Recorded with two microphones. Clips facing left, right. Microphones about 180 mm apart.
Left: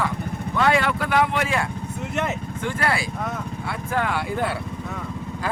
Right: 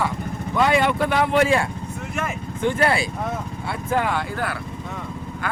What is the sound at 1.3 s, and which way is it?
Speech, 30° right (ahead or behind).